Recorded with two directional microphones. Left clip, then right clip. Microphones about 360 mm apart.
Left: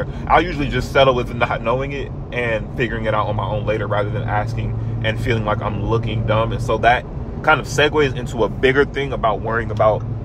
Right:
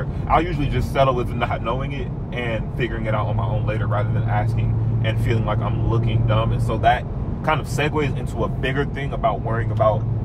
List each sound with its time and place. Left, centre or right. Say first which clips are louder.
0.3 s speech: left 4 dB; left
3.1 s speech: left 7 dB; left